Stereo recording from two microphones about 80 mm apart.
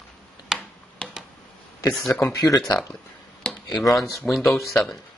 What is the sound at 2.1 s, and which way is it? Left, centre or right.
Speech, left.